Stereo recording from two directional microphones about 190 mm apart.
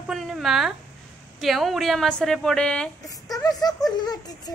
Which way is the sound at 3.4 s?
20° left (ahead or behind).